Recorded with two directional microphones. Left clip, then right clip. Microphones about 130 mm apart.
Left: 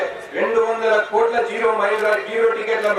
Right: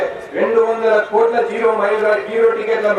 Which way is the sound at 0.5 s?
30° right (ahead or behind).